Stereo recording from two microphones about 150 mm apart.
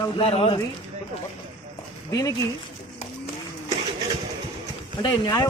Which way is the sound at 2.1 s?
25° left (ahead or behind).